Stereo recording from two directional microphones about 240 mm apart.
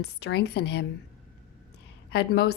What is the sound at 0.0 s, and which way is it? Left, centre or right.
Speech, left.